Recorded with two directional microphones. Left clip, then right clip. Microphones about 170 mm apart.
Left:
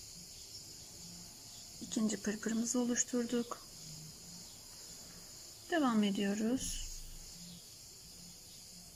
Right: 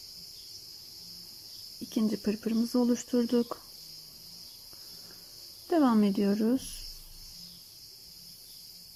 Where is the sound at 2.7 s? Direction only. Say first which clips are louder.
Right 8 dB; 35° right (ahead or behind).